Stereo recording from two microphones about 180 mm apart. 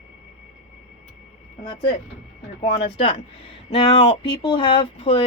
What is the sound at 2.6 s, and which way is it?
Speech, 30° left (ahead or behind).